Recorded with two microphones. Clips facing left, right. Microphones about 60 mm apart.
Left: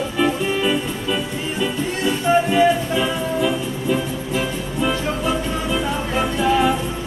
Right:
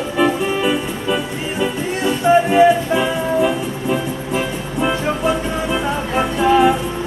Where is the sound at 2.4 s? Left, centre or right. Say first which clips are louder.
Right 4 dB; right.